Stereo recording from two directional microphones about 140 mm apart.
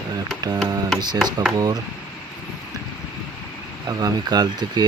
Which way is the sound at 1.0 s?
30° right (ahead or behind).